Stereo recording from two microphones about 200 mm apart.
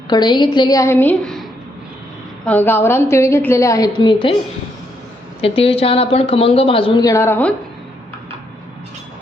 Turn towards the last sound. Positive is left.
turn(degrees=10)  # may be behind; listen again after turning